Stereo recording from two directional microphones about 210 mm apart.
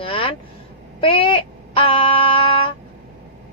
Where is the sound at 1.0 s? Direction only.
25° left (ahead or behind).